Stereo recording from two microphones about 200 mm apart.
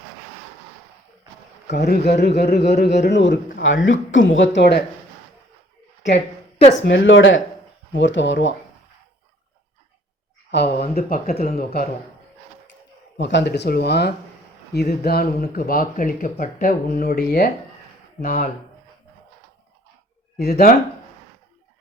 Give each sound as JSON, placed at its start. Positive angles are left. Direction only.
{"t": 1.7, "sound": "speech", "side_deg": 55}
{"t": 6.8, "sound": "speech", "side_deg": 65}
{"t": 10.5, "sound": "speech", "side_deg": 55}
{"t": 13.1, "sound": "speech", "side_deg": 60}